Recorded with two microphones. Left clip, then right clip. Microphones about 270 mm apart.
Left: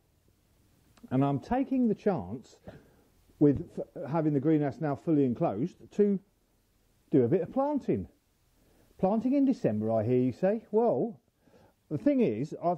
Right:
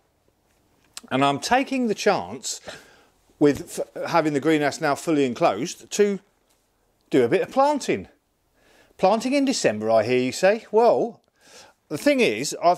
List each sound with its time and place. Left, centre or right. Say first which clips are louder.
0.9 s speech: right 9 dB; centre